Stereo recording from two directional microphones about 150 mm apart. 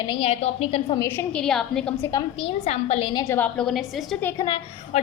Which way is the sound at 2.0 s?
20° left (ahead or behind).